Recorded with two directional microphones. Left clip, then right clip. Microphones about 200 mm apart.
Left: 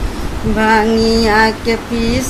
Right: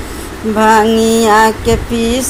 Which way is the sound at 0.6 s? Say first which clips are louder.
Right 4 dB; 15° right (ahead or behind).